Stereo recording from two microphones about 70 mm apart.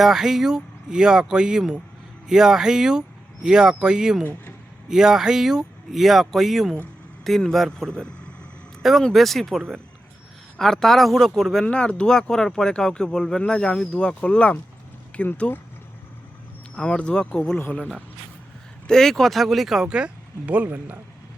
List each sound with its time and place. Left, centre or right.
0.0 s speech: centre
8.8 s speech: centre
11.6 s speech: centre
16.7 s speech: centre
17.6 s speech: left
18.9 s speech: centre
20.5 s speech: right